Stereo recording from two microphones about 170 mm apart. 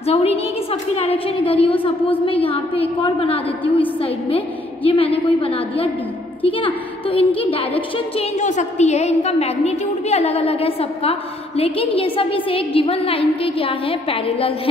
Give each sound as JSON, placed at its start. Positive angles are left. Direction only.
{"t": 0.0, "sound": "a woman's voice", "side_deg": 35}
{"t": 4.8, "sound": "a woman's voice", "side_deg": 35}